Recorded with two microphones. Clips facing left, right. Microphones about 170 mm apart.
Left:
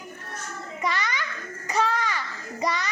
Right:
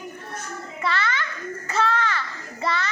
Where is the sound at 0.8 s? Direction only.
15° left (ahead or behind).